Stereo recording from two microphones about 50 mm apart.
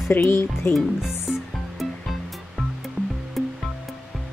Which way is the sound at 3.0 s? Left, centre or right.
Left.